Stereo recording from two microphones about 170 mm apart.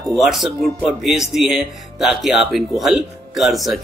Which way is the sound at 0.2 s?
Centre (ahead or behind).